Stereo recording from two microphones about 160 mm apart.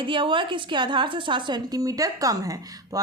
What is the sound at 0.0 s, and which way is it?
A woman's voice, 30° right (ahead or behind).